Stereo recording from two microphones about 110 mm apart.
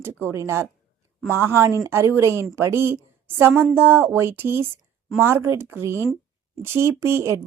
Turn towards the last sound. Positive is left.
turn(degrees=-25)  # may be behind; listen again after turning